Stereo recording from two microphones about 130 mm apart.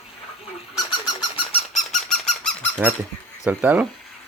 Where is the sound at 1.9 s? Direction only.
5° left (ahead or behind).